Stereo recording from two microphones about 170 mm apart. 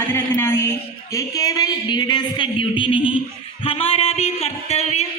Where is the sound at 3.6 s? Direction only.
35° left (ahead or behind).